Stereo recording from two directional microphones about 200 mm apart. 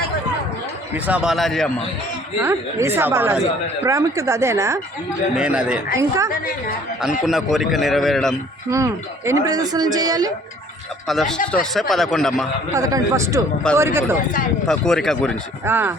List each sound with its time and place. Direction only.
1.0 s speech: 5° right (ahead or behind)
2.4 s speech: 15° right (ahead or behind)
6.0 s speech: 15° right (ahead or behind)
7.3 s speech: centre (ahead or behind)
8.7 s speech: 15° right (ahead or behind)
11.1 s speech: centre (ahead or behind)
12.7 s speech: 15° right (ahead or behind)
14.7 s speech: centre (ahead or behind)
15.6 s speech: 10° right (ahead or behind)